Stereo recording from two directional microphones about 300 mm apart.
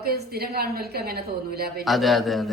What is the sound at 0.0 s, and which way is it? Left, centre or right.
A woman's voice, right.